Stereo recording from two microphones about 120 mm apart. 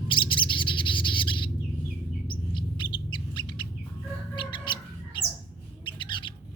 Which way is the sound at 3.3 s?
40° left (ahead or behind).